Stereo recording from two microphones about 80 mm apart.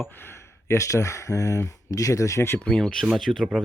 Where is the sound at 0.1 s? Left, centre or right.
Left.